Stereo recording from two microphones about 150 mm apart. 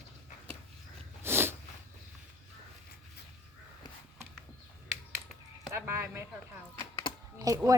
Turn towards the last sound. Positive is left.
turn(degrees=-25)  # may be behind; listen again after turning